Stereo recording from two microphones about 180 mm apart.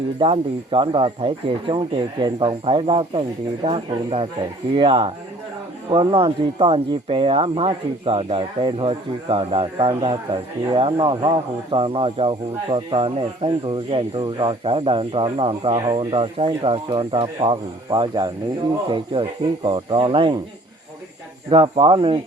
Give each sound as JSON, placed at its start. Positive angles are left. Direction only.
{"t": 0.2, "sound": "speech", "side_deg": -30}
{"t": 21.5, "sound": "speech", "side_deg": -30}